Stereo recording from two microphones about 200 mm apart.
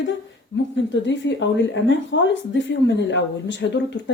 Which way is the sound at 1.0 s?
65° left (ahead or behind).